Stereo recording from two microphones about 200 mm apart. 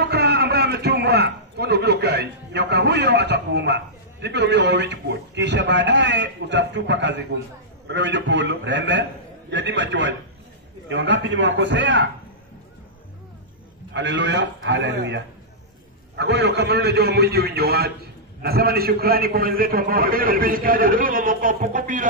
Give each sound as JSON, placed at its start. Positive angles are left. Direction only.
{"t": 0.0, "sound": "a man's voice", "side_deg": -55}
{"t": 13.9, "sound": "a man's voice", "side_deg": -60}